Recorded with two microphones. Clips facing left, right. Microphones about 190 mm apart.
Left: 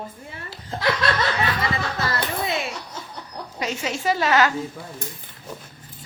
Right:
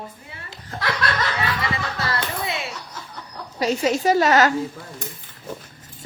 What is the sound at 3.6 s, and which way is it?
Speech, 40° right (ahead or behind).